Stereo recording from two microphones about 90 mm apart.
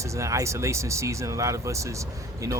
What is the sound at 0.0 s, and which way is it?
Speech, 35° right (ahead or behind).